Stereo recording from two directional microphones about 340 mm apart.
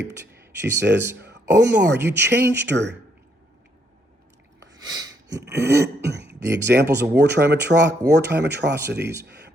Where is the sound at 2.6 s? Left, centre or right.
Right.